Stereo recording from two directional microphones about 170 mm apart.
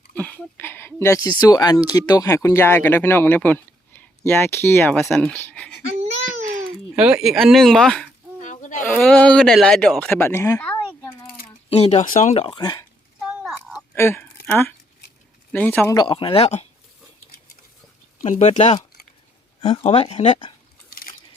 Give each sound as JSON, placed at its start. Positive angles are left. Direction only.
{"t": 0.1, "sound": "a sound", "side_deg": 10}
{"t": 1.4, "sound": "speech", "side_deg": 20}
{"t": 4.9, "sound": "speech", "side_deg": 0}
{"t": 6.0, "sound": "baby cry", "side_deg": -40}
{"t": 6.9, "sound": "speech", "side_deg": -5}
{"t": 8.4, "sound": "goat", "side_deg": 45}
{"t": 8.9, "sound": "speech", "side_deg": 10}
{"t": 10.7, "sound": "a sound", "side_deg": 10}
{"t": 11.7, "sound": "speech", "side_deg": 35}
{"t": 13.4, "sound": "a sound", "side_deg": 0}
{"t": 13.9, "sound": "speech", "side_deg": 15}
{"t": 16.0, "sound": "speech", "side_deg": 30}
{"t": 18.2, "sound": "speech", "side_deg": 40}